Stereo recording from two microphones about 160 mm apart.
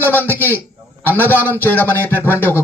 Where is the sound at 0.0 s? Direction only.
10° left (ahead or behind).